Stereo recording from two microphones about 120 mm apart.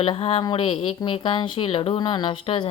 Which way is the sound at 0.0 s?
50° left (ahead or behind).